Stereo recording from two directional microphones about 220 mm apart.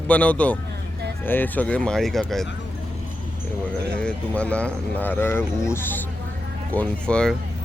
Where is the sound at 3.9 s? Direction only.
5° left (ahead or behind).